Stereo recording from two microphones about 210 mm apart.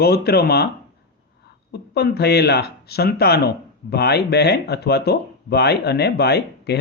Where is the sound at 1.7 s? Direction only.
50° left (ahead or behind).